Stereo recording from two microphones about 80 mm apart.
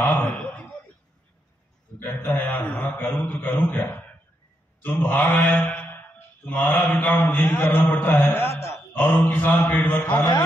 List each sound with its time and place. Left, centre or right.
0.2 s a sound: centre
2.0 s a man's voice: left
4.8 s mantra: left
9.0 s a man's voice: left